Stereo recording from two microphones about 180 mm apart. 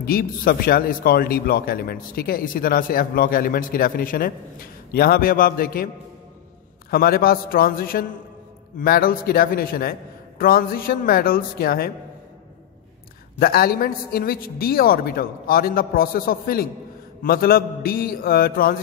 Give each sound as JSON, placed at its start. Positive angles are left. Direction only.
{"t": 0.0, "sound": "a man's voice", "side_deg": 55}
{"t": 6.9, "sound": "a man's voice", "side_deg": 55}
{"t": 13.4, "sound": "a man's voice", "side_deg": 55}